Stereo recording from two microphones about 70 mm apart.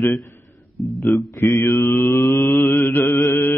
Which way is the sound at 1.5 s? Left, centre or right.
Left.